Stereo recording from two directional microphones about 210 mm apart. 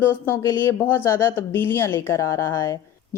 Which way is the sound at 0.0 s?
10° left (ahead or behind).